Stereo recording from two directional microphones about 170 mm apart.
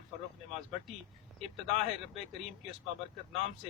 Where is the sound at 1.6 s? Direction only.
Centre (ahead or behind).